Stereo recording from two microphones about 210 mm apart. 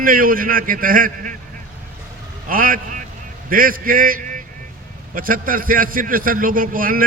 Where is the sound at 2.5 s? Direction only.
40° right (ahead or behind).